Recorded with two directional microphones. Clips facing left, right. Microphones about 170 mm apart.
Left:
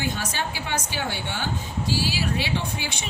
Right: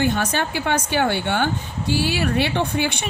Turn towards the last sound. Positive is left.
turn(degrees=-60)  # may be behind; listen again after turning